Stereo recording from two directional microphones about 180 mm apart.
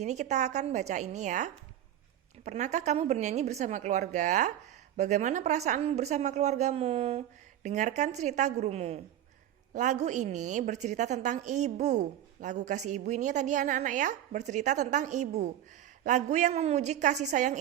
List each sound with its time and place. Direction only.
0.0 s a woman's voice: 40° right (ahead or behind)